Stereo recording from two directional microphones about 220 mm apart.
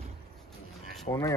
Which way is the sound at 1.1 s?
25° left (ahead or behind).